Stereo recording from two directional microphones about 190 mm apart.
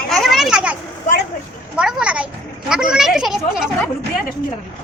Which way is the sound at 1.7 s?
5° right (ahead or behind).